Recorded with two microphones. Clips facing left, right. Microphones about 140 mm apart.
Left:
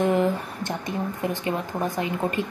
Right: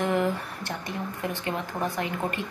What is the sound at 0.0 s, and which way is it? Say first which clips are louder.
A woman's voice: left 4 dB; 20° left (ahead or behind).